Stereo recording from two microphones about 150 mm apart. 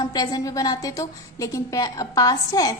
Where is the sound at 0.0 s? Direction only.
25° left (ahead or behind).